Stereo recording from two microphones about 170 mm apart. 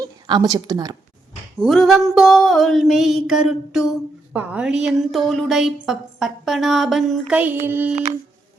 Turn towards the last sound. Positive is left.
turn(degrees=-10)  # may be behind; listen again after turning